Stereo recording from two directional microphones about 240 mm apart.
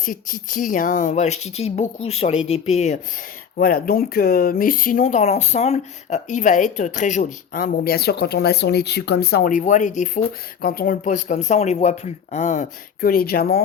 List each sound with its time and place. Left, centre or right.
0.0 s speech: left
3.6 s speech: left